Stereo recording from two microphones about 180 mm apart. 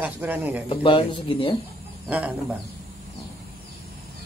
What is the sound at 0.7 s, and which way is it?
Speech, 30° left (ahead or behind).